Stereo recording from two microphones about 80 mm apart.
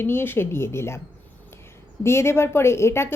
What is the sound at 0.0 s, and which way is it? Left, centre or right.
Speech, left.